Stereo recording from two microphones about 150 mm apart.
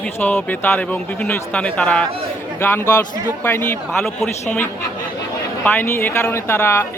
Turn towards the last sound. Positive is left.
turn(degrees=15)  # may be behind; listen again after turning